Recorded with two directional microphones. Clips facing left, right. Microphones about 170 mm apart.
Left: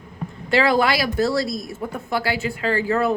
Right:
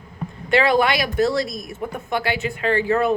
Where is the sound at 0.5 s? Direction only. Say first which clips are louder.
Right 1 dB; 20° right (ahead or behind).